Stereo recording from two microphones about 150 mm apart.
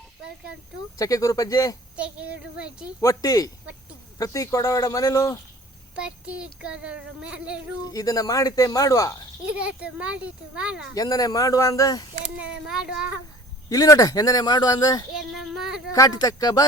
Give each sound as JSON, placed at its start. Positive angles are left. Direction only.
{"t": 0.9, "sound": "speech", "side_deg": 20}
{"t": 2.0, "sound": "speech", "side_deg": -10}
{"t": 3.0, "sound": "speech", "side_deg": 25}
{"t": 6.0, "sound": "speech", "side_deg": -5}
{"t": 7.9, "sound": "speech", "side_deg": 25}
{"t": 9.5, "sound": "speech", "side_deg": -10}
{"t": 10.9, "sound": "speech", "side_deg": 25}
{"t": 12.4, "sound": "speech", "side_deg": -5}
{"t": 13.7, "sound": "speech", "side_deg": 20}
{"t": 15.1, "sound": "child singing", "side_deg": 0}
{"t": 15.9, "sound": "speech", "side_deg": 25}